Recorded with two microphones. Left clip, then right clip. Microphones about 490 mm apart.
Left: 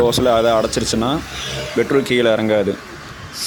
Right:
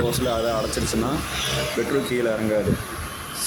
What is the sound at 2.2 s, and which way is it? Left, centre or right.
Speech, right.